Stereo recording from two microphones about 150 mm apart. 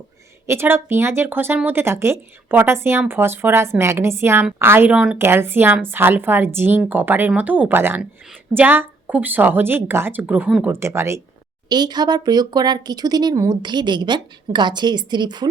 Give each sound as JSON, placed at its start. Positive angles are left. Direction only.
{"t": 0.4, "sound": "speech", "side_deg": -15}
{"t": 11.7, "sound": "speech", "side_deg": -30}